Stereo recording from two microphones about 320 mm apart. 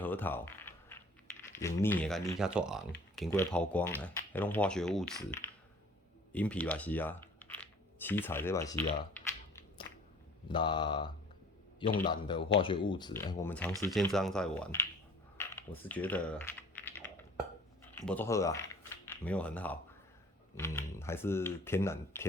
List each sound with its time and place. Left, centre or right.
0.0 s a sound: centre
1.5 s speech: centre
9.1 s a sound: centre
10.5 s speech: centre
15.4 s typing: centre
17.9 s speech: centre